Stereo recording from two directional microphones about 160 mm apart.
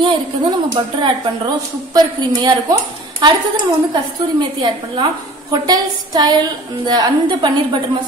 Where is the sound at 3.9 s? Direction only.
30° right (ahead or behind).